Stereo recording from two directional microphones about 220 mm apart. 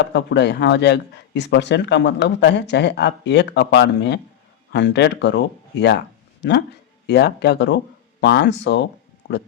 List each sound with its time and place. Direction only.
0.0 s speech: 55° left (ahead or behind)